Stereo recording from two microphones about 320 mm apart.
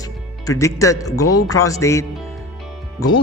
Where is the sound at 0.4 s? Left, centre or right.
Centre.